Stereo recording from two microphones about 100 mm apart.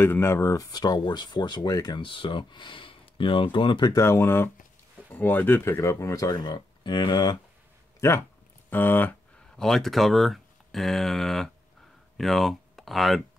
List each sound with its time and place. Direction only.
0.0 s speech: 25° left (ahead or behind); by 3.9 s 50° left (ahead or behind)
3.9 s speech: 25° left (ahead or behind)
6.3 s speech: 45° left (ahead or behind)
8.0 s speech: 30° left (ahead or behind)
8.6 s a sound: 20° left (ahead or behind)
9.6 s speech: 5° left (ahead or behind)